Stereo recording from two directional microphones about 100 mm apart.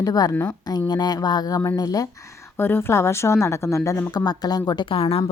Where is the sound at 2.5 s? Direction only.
25° left (ahead or behind).